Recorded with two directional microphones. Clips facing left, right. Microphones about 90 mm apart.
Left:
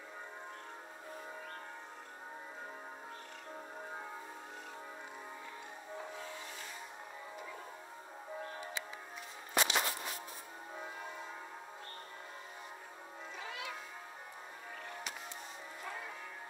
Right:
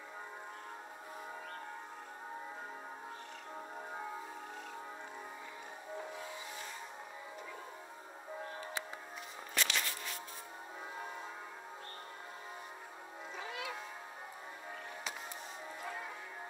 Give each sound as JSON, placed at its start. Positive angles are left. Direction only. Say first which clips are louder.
{"t": 9.5, "sound": "music", "louder": "left 4 dB", "side_deg": 25}